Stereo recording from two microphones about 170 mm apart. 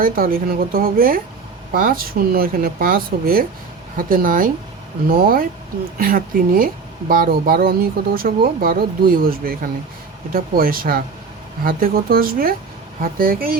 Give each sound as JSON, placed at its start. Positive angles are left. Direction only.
{"t": 0.0, "sound": "speech", "side_deg": -55}